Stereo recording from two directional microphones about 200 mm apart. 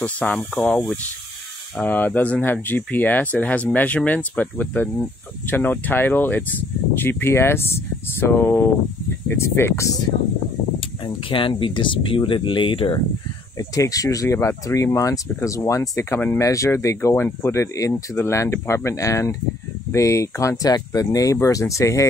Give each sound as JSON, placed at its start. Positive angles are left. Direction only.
{"t": 0.0, "sound": "speech", "side_deg": 5}
{"t": 10.8, "sound": "speech", "side_deg": 25}